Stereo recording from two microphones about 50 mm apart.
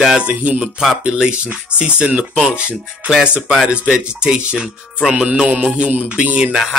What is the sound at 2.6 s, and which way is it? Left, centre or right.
Speech, right.